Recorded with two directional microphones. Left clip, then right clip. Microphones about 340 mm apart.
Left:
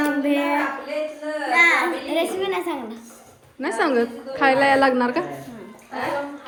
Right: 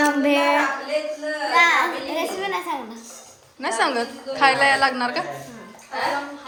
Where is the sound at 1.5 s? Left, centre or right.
Centre.